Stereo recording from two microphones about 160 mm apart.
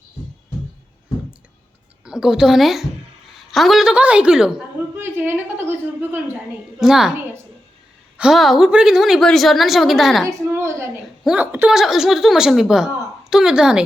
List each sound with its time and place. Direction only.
2.0 s a woman's voice: 5° right (ahead or behind)
8.2 s a woman's voice: centre (ahead or behind)
10.2 s a woman's voice: 15° right (ahead or behind)